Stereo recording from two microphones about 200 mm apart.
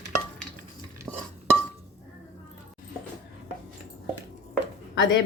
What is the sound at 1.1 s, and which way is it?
Stir, 10° right (ahead or behind).